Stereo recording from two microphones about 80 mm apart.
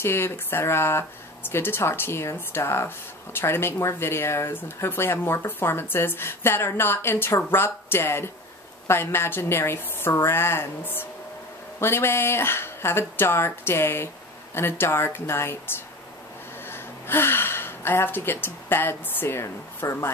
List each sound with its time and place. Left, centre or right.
0.0 s speech: left